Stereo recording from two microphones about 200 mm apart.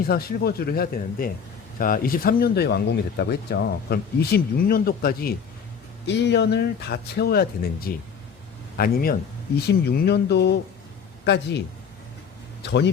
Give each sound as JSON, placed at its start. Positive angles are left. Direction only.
{"t": 0.1, "sound": "speech", "side_deg": 50}
{"t": 6.1, "sound": "speech", "side_deg": 60}
{"t": 12.6, "sound": "speech", "side_deg": 60}